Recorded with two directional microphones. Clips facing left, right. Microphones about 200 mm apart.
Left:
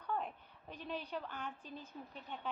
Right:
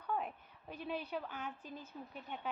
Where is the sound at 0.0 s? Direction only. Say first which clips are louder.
Right 1 dB; 10° right (ahead or behind).